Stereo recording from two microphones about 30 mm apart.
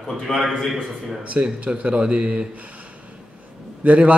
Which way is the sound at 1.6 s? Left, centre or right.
Right.